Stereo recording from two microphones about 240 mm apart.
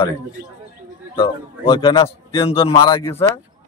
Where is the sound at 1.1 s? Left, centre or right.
Left.